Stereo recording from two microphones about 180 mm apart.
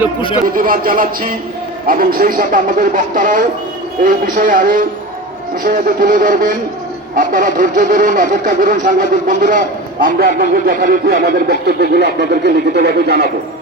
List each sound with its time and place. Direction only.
0.4 s speech: 50° right (ahead or behind); by 13.2 s 70° right (ahead or behind)